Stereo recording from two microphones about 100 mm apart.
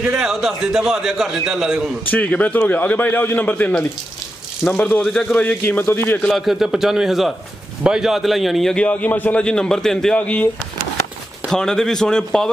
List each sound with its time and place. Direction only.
0.2 s a man's voice: centre (ahead or behind)
2.0 s a man's voice: 15° left (ahead or behind)
6.3 s a man's voice: centre (ahead or behind)